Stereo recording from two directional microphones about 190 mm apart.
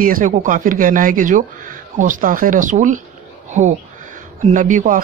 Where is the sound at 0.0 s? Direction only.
45° right (ahead or behind).